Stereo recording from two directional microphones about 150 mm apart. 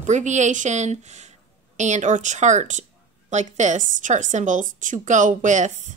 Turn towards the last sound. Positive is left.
turn(degrees=-55)  # may be behind; listen again after turning